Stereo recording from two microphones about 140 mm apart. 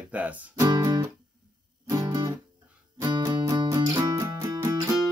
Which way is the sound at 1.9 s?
25° right (ahead or behind).